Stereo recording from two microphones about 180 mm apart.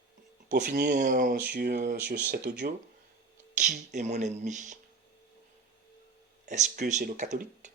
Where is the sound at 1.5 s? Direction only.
60° right (ahead or behind).